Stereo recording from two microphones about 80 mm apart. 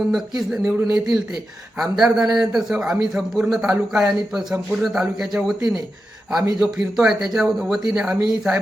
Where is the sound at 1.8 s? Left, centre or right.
Centre.